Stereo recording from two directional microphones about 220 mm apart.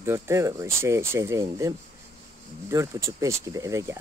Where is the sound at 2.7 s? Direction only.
15° right (ahead or behind).